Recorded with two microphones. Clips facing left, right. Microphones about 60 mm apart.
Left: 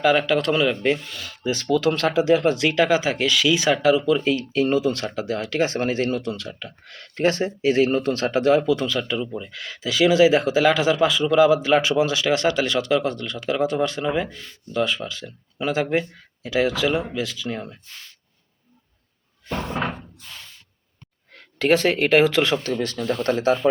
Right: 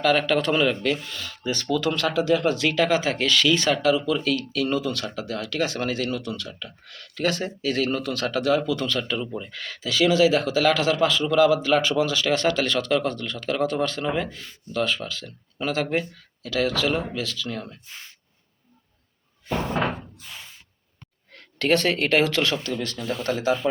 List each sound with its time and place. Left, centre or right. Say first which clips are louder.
0.0 s speech: left 2 dB; centre; by 7.1 s left
7.2 s speech: left 4 dB; left
7.4 s speech: left 6 dB; left
8.9 s speech: left 2 dB; centre
14.3 s speech: even; centre
14.7 s speech: left 2 dB; centre
17.8 s speech: right 1 dB; right
19.5 s speech: right 1 dB; centre
19.8 s knock: right 1 dB; centre
21.3 s speech: left 3 dB; centre
22.6 s speech: left 4 dB; left